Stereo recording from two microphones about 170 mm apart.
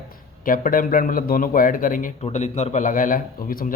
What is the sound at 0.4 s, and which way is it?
Speech, 55° left (ahead or behind).